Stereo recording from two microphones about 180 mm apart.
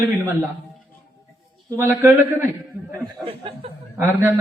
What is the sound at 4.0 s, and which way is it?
Speech, 10° right (ahead or behind).